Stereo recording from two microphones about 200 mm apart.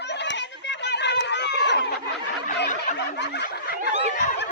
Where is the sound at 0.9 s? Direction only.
60° left (ahead or behind).